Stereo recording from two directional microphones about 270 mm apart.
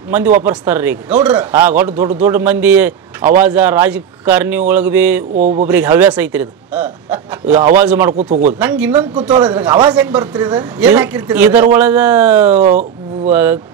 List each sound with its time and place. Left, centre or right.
0.5 s speech: centre
5.3 s speech: right
5.7 s speech: centre
9.7 s speech: centre
9.9 s speech: centre
12.6 s a sound: right
13.3 s speech: centre